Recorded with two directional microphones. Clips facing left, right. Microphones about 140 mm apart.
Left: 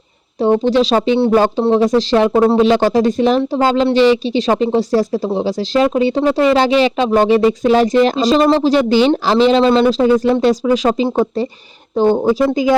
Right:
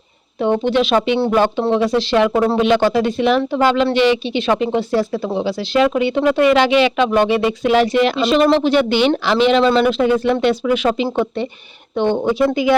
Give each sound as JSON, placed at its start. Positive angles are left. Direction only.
{"t": 0.4, "sound": "speech", "side_deg": 35}